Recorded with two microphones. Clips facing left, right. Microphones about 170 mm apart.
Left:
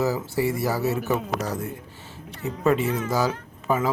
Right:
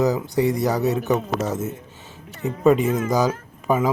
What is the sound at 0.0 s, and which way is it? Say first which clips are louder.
Speech: right 4 dB; 20° right (ahead or behind).